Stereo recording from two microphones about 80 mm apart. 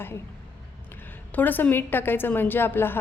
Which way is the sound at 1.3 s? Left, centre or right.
Left.